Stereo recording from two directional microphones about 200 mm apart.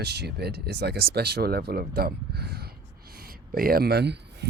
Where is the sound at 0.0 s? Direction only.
55° right (ahead or behind).